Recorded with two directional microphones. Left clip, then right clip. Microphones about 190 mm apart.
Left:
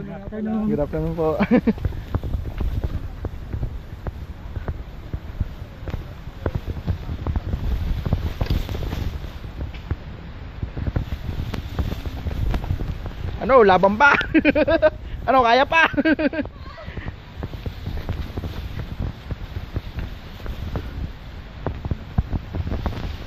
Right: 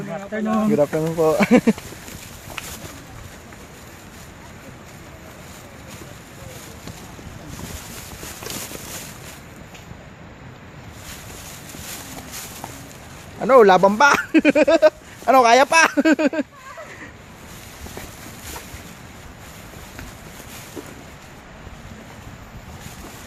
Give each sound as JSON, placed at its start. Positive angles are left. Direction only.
{"t": 0.7, "sound": "speech", "side_deg": -20}
{"t": 13.4, "sound": "speech", "side_deg": -25}